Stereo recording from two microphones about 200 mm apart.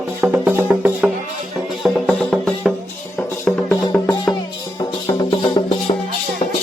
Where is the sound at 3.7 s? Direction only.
20° left (ahead or behind).